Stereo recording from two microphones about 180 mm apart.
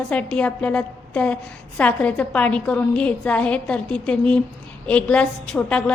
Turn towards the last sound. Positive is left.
turn(degrees=5)  # may be behind; listen again after turning